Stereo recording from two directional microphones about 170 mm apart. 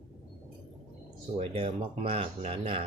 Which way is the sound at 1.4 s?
30° right (ahead or behind).